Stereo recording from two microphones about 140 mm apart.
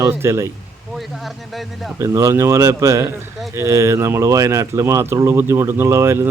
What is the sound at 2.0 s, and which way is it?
Speech, 20° right (ahead or behind).